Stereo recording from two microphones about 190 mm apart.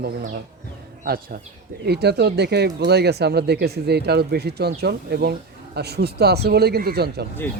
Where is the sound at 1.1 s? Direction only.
50° right (ahead or behind).